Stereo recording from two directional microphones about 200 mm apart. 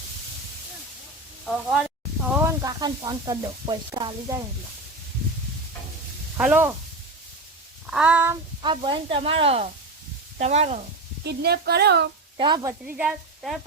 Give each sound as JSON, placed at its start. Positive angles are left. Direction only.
{"t": 1.5, "sound": "speech", "side_deg": 0}
{"t": 2.3, "sound": "sizzle", "side_deg": -10}
{"t": 6.3, "sound": "sizzle", "side_deg": -10}
{"t": 7.9, "sound": "sizzle", "side_deg": -5}
{"t": 8.6, "sound": "speech", "side_deg": -25}
{"t": 11.2, "sound": "speech", "side_deg": -55}
{"t": 12.4, "sound": "speech", "side_deg": -20}
{"t": 12.8, "sound": "speech", "side_deg": -5}